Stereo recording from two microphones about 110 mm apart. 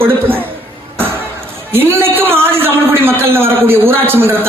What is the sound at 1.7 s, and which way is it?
A man's voice, 20° right (ahead or behind).